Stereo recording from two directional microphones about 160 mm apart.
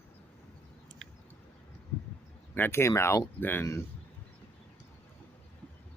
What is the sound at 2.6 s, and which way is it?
Speech, 15° left (ahead or behind).